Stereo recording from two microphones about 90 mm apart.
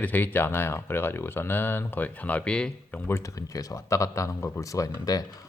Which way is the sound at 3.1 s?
35° left (ahead or behind).